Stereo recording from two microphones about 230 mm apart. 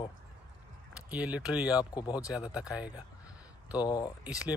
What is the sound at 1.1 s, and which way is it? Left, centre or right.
Speech, centre.